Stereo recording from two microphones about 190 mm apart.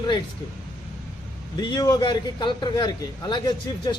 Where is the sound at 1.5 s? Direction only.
20° left (ahead or behind).